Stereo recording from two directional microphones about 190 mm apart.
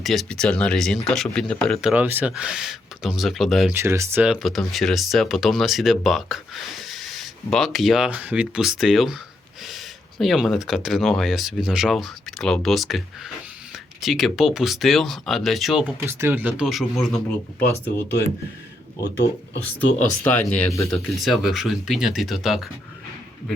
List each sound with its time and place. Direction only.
0.0 s speech: centre (ahead or behind)
3.8 s speech: 15° right (ahead or behind)
16.0 s speech: 10° right (ahead or behind)
17.6 s speech: 10° left (ahead or behind)
19.6 s speech: 10° left (ahead or behind)
20.8 s speech: centre (ahead or behind)